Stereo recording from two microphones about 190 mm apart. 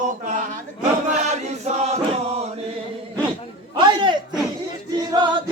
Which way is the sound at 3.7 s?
25° right (ahead or behind).